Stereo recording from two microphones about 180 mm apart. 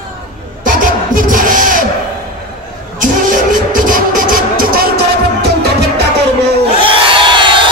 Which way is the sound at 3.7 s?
50° right (ahead or behind).